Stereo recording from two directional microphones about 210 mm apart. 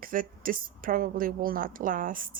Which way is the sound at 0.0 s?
40° right (ahead or behind).